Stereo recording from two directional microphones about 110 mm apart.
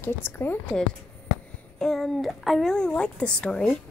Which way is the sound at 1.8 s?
5° left (ahead or behind).